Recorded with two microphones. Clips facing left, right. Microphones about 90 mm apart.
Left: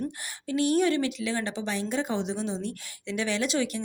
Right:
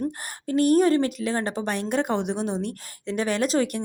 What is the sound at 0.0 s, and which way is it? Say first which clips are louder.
A woman's voice: right 5 dB; 45° right (ahead or behind).